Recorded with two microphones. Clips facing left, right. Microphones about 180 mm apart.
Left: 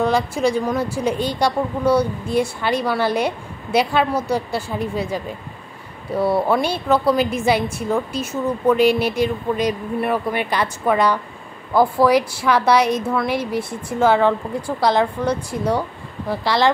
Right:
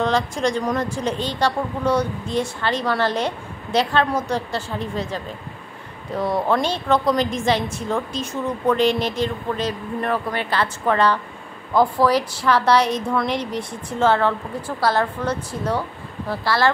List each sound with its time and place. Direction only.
0.0 s speech: 10° left (ahead or behind)